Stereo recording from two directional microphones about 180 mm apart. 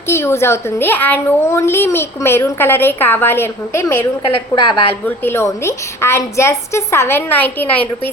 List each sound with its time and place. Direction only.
0.1 s a child's voice: 15° left (ahead or behind)
4.4 s a woman's voice: 30° left (ahead or behind)
5.0 s a child's voice: 15° left (ahead or behind)